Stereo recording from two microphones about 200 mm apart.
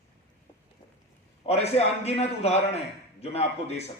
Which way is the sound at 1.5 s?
30° left (ahead or behind).